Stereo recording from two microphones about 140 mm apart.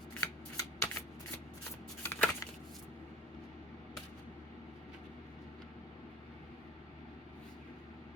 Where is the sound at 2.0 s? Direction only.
15° left (ahead or behind).